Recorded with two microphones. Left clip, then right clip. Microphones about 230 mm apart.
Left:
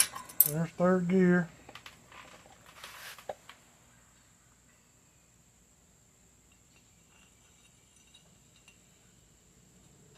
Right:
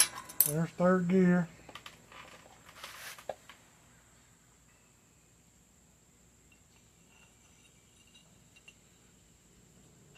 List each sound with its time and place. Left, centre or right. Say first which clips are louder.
0.0 s keys jangling: right 1 dB; centre
0.5 s speech: even; centre